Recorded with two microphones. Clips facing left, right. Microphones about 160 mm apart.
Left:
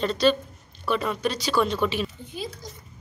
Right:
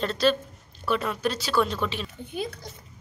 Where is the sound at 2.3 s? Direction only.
60° right (ahead or behind).